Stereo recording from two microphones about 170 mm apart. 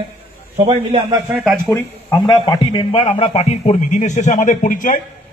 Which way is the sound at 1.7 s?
15° left (ahead or behind).